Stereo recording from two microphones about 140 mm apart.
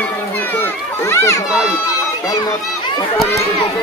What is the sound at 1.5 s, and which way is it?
Speech, 5° right (ahead or behind).